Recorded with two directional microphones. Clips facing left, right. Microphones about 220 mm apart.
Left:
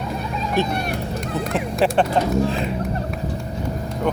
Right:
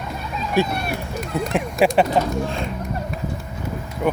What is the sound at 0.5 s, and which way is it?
Speech, 10° right (ahead or behind).